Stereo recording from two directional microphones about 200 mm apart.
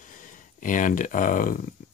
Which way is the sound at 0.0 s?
40° left (ahead or behind).